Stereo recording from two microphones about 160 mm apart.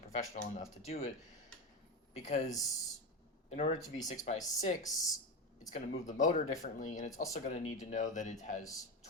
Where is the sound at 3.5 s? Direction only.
50° left (ahead or behind).